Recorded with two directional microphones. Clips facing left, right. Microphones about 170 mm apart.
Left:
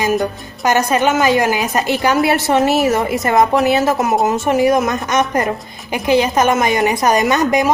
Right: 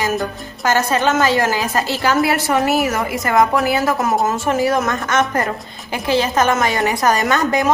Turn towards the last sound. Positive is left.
turn(degrees=15)  # may be behind; listen again after turning